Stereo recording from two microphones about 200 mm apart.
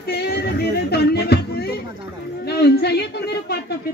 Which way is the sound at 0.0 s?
55° left (ahead or behind).